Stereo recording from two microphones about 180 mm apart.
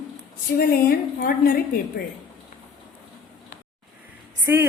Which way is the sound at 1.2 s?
55° left (ahead or behind).